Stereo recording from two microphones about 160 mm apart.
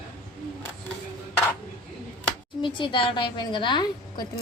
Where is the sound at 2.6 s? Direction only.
30° left (ahead or behind).